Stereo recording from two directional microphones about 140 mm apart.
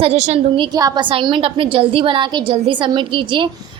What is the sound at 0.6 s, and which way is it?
A woman's voice, 30° right (ahead or behind).